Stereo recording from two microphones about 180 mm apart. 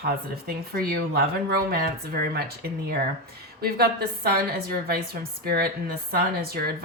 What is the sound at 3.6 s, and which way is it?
Speech, 55° right (ahead or behind).